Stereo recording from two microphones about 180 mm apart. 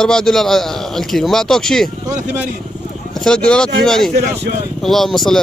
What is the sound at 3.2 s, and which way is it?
Speech, 5° left (ahead or behind).